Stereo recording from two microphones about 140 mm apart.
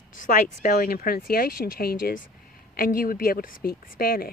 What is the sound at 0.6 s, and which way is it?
Speech, 80° left.